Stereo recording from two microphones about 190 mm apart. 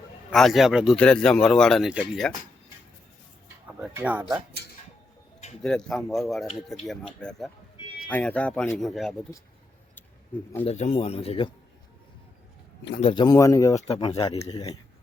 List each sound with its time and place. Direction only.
0.3 s speech: centre (ahead or behind)
3.9 s speech: 10° right (ahead or behind)
5.6 s speech: 5° left (ahead or behind)
10.7 s speech: 35° left (ahead or behind)
13.0 s speech: 25° left (ahead or behind)
13.8 s speech: 30° left (ahead or behind)